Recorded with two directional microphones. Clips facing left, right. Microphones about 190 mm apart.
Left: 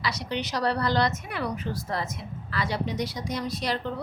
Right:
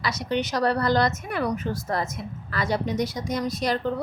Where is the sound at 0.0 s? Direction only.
50° right (ahead or behind).